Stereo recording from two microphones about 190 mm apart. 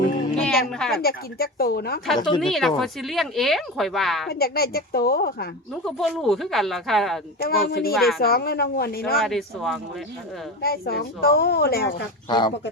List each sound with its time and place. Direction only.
0.4 s speech: 5° left (ahead or behind)
1.0 s speech: 55° left (ahead or behind)
2.4 s speech: centre (ahead or behind)
4.3 s speech: 55° left (ahead or behind)
5.8 s speech: centre (ahead or behind)
7.4 s speech: 55° left (ahead or behind)
7.9 s speech: centre (ahead or behind)
8.2 s speech: 55° left (ahead or behind)
9.1 s speech: centre (ahead or behind)
10.6 s speech: 55° left (ahead or behind)
12.3 s speech: 25° left (ahead or behind)